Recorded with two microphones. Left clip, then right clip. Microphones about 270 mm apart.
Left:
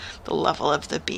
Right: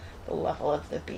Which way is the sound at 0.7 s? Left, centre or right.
Left.